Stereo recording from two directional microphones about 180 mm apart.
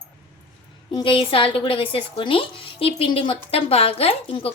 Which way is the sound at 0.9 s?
25° left (ahead or behind).